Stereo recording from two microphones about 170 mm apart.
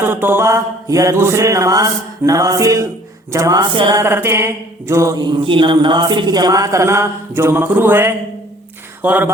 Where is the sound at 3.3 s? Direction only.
20° right (ahead or behind).